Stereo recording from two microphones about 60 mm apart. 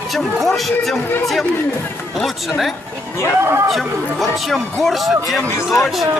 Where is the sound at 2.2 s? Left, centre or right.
Centre.